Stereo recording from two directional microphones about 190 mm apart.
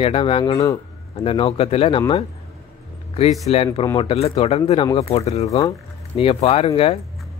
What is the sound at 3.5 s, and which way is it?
Speech, 30° left (ahead or behind).